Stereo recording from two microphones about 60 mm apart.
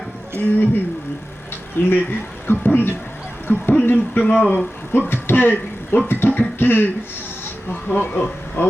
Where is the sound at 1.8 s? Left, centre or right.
Left.